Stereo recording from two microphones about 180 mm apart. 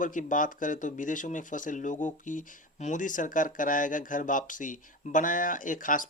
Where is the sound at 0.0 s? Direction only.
45° left (ahead or behind).